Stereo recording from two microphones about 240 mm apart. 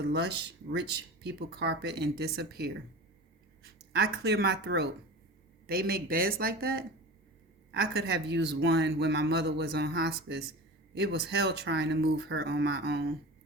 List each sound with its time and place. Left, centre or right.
0.0 s speech: right